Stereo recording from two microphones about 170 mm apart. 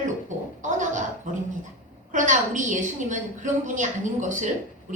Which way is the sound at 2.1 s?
45° right (ahead or behind).